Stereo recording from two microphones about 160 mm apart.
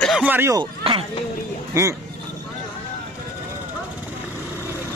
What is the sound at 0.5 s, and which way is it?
Speech, 30° right (ahead or behind).